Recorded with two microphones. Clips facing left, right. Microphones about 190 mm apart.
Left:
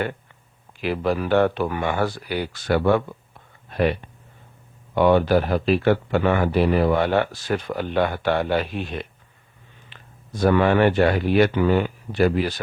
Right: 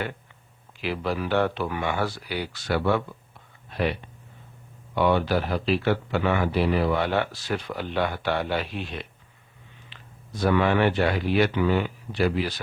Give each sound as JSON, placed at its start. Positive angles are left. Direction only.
{"t": 0.8, "sound": "speech", "side_deg": 50}
{"t": 4.9, "sound": "speech", "side_deg": 50}